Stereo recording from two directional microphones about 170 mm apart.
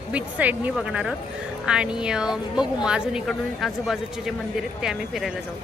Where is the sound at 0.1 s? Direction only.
10° right (ahead or behind).